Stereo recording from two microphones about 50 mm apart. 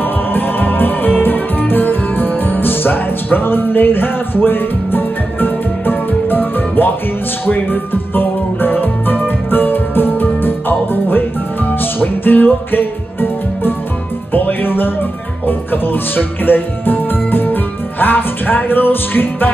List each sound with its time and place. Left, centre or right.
0.0 s music: left
14.3 s speech: left